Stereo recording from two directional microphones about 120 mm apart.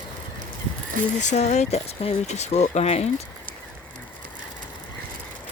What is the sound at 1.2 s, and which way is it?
Speech, 75° left (ahead or behind).